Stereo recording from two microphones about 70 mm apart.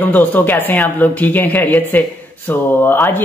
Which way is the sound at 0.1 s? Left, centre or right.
Left.